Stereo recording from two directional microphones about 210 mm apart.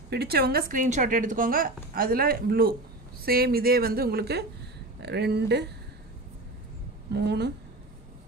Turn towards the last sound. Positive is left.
turn(degrees=-55)  # may be behind; listen again after turning